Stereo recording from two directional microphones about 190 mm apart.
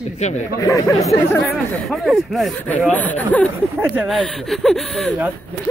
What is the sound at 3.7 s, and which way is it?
Speech, 5° right (ahead or behind).